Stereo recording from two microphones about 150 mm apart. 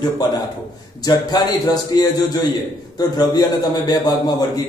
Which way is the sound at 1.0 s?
25° left (ahead or behind).